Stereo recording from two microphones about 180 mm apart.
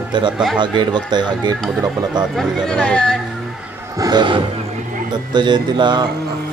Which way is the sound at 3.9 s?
20° right (ahead or behind).